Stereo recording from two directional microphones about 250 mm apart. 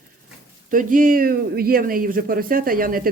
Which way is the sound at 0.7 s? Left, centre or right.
Right.